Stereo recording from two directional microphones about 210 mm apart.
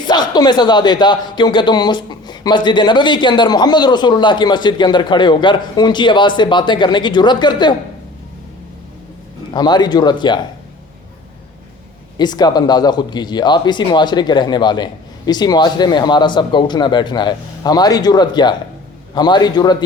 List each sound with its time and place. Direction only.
0.0 s speech: 20° left (ahead or behind)
9.5 s speech: 20° left (ahead or behind)
12.1 s speech: 20° left (ahead or behind)